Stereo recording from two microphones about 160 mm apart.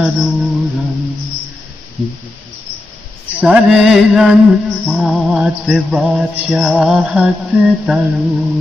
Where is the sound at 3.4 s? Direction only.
5° right (ahead or behind).